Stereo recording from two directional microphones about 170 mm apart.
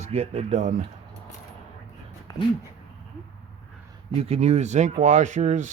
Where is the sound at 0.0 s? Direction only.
40° right (ahead or behind).